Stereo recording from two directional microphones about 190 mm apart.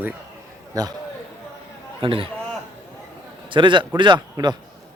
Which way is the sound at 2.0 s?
30° right (ahead or behind).